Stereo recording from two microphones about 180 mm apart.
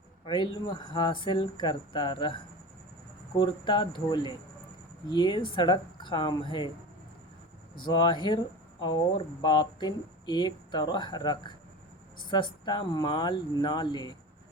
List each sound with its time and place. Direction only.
0.3 s speech: 25° left (ahead or behind)
7.9 s speech: 25° left (ahead or behind)